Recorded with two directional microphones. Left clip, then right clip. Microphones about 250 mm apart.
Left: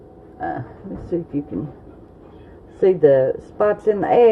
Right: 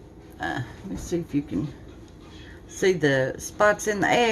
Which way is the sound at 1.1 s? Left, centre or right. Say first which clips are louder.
Left 5 dB; right.